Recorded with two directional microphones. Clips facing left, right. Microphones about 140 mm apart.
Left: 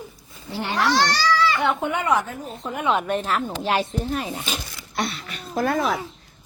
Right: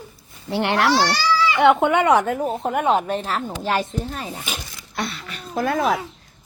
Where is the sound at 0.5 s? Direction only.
75° right (ahead or behind).